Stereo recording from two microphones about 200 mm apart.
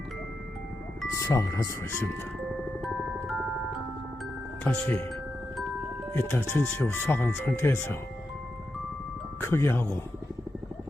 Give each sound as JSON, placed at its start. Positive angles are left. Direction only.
{"t": 1.1, "sound": "speech", "side_deg": 15}
{"t": 4.6, "sound": "speech", "side_deg": 10}
{"t": 6.1, "sound": "speech", "side_deg": 10}
{"t": 9.4, "sound": "speech", "side_deg": 10}